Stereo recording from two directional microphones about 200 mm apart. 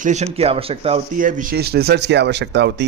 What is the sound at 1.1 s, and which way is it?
A man's voice, 40° right (ahead or behind).